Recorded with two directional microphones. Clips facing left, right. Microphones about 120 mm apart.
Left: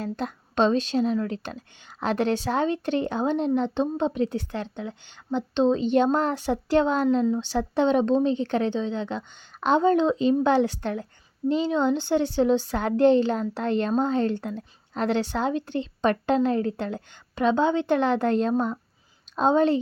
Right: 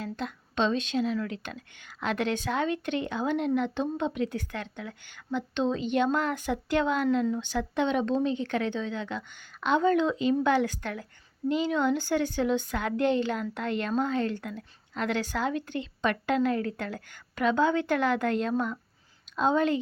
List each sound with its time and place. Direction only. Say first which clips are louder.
0.0 s speech: left 4 dB; 40° left (ahead or behind)